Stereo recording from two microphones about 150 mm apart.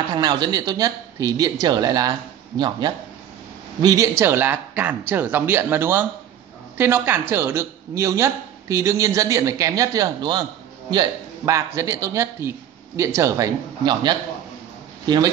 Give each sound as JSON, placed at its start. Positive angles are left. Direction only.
{"t": 0.1, "sound": "speech", "side_deg": -30}